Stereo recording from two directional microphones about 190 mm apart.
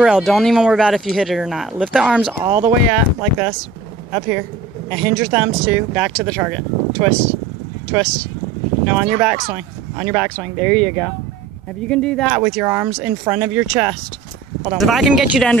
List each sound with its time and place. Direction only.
0.0 s speech: centre (ahead or behind)